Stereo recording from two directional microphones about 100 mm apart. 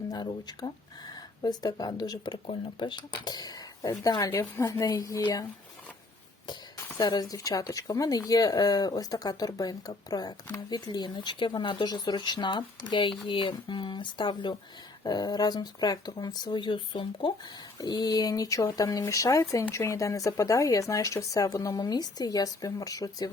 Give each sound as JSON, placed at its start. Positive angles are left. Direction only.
{"t": 0.1, "sound": "speech", "side_deg": 40}
{"t": 4.3, "sound": "speech", "side_deg": 30}
{"t": 7.0, "sound": "speech", "side_deg": 45}